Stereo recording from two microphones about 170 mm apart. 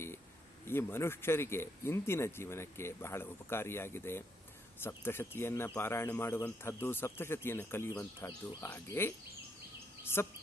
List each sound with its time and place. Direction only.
0.7 s speech: 15° left (ahead or behind)
10.2 s speech: 15° left (ahead or behind)